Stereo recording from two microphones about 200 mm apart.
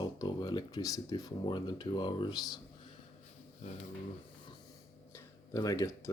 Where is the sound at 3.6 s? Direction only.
35° left (ahead or behind).